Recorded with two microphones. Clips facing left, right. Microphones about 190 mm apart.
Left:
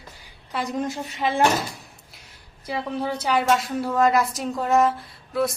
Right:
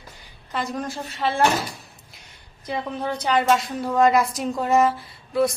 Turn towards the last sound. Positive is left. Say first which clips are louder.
# right 3 dB
turn(degrees=0)  # may be behind; listen again after turning